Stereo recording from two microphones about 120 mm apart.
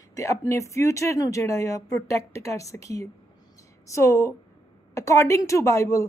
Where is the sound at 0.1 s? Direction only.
25° left (ahead or behind).